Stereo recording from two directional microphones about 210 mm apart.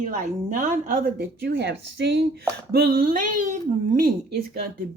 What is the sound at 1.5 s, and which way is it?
A woman's voice, 55° right (ahead or behind).